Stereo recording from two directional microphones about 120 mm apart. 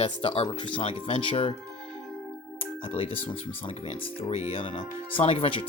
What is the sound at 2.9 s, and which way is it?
Speech, 55° left (ahead or behind).